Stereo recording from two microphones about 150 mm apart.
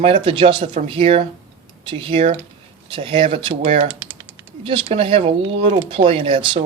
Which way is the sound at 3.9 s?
15° right (ahead or behind).